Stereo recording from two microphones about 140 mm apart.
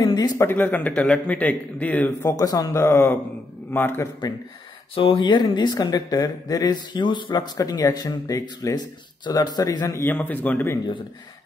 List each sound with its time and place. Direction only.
0.0 s a sound: 30° left (ahead or behind)
0.5 s a man's voice: 15° left (ahead or behind)
2.2 s a man's voice: 25° left (ahead or behind)
4.9 s speech: 40° left (ahead or behind); by 10.8 s 15° left (ahead or behind)